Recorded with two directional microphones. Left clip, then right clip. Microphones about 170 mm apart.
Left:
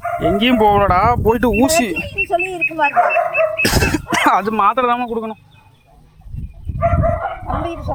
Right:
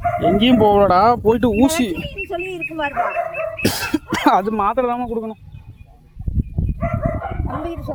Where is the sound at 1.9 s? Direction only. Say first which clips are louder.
Left 5 dB; 5° left (ahead or behind).